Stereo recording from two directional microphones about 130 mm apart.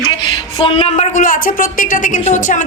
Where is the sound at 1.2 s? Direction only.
90° left.